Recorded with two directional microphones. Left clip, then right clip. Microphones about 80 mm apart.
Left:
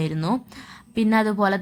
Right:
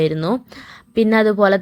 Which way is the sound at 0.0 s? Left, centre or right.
Right.